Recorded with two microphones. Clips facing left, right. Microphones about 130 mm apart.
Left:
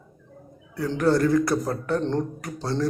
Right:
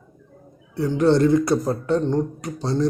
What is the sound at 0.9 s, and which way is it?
Speech, 25° right (ahead or behind).